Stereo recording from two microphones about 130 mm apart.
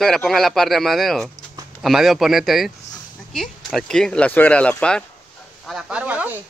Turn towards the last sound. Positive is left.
turn(degrees=-10)  # may be behind; listen again after turning